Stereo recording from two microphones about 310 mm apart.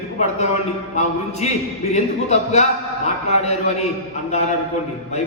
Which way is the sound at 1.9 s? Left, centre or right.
Left.